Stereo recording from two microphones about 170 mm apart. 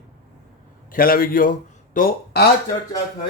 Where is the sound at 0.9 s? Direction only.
60° left (ahead or behind).